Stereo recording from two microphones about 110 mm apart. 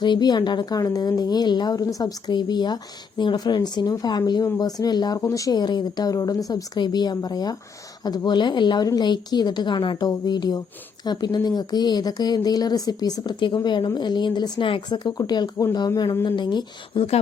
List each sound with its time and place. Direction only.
0.0 s speech: 40° left (ahead or behind)